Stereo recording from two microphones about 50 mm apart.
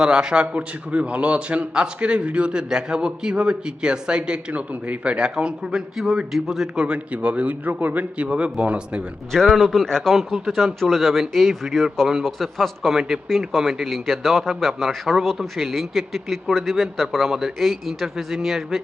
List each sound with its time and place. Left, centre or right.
0.0 s a man's voice: centre
6.0 s a man's voice: centre
6.8 s a man's voice: right
8.3 s a man's voice: right
9.5 s a man's voice: centre
10.2 s a man's voice: centre